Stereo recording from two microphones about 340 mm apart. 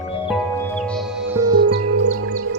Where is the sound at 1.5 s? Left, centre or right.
Right.